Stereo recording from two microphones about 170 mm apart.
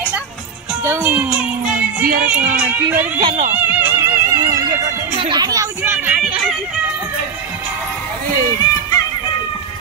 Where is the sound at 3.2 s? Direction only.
30° right (ahead or behind).